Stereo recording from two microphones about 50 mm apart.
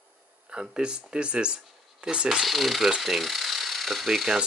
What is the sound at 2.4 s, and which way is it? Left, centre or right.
Speech, centre.